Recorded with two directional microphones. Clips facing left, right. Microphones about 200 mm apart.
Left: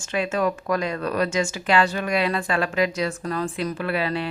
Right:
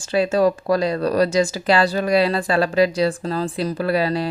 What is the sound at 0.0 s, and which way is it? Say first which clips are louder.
A woman's voice: right 6 dB; 35° right (ahead or behind).